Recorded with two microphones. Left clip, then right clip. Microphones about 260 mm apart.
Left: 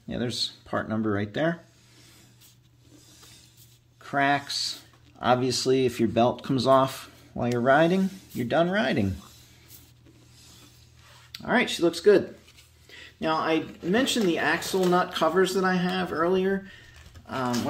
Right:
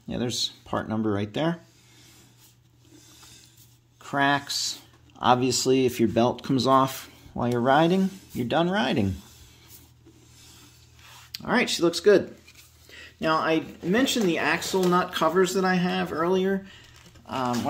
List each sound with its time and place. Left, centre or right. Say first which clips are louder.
0.1 s speech: right 1 dB; centre
4.0 s speech: right 1 dB; centre
11.3 s speech: even; centre